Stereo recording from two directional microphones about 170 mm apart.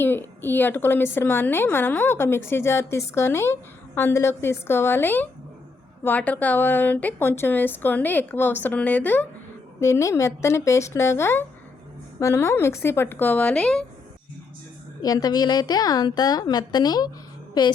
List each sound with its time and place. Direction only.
0.0 s a woman's voice: 10° left (ahead or behind)
15.0 s a woman's voice: 25° left (ahead or behind)